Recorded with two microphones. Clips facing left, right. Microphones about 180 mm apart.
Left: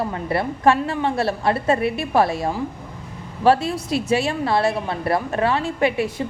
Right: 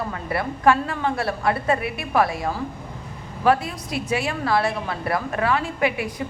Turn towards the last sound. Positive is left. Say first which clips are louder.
# left 3 dB
turn(degrees=25)  # may be behind; listen again after turning